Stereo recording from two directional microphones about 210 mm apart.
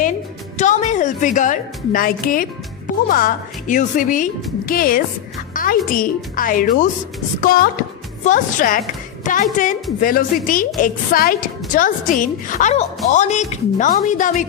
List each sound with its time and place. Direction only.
0.6 s a woman's voice: 35° left (ahead or behind)